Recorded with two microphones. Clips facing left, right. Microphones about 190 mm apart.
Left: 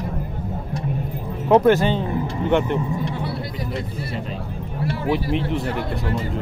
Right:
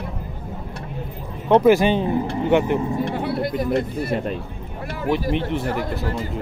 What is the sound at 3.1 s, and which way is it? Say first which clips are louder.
Speech: right 5 dB; 55° right (ahead or behind).